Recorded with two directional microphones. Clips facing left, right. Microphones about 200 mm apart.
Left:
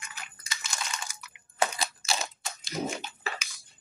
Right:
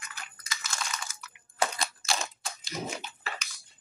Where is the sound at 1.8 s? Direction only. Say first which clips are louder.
Even; centre (ahead or behind).